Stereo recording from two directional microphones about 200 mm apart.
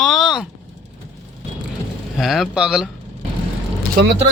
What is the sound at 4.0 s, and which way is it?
Speech, 50° right (ahead or behind).